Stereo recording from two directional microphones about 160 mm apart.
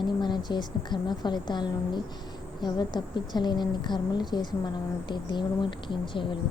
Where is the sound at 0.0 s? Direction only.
30° left (ahead or behind).